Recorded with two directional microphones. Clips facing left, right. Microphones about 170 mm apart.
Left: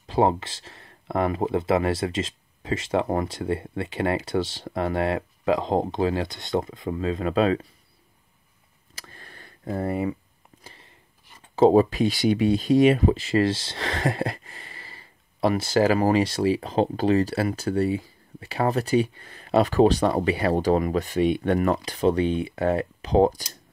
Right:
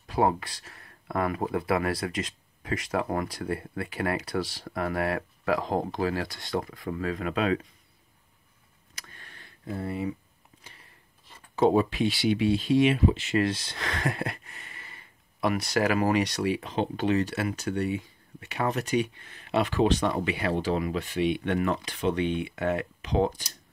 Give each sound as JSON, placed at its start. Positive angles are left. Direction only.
{"t": 0.0, "sound": "speech", "side_deg": 25}
{"t": 8.9, "sound": "clicking", "side_deg": 30}
{"t": 10.6, "sound": "a sound", "side_deg": 30}
{"t": 11.4, "sound": "speech", "side_deg": 30}